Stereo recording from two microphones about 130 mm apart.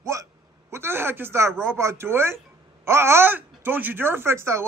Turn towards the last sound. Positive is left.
turn(degrees=-20)  # may be behind; listen again after turning